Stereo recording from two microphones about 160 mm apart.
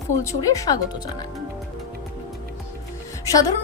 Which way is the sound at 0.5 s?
20° left (ahead or behind).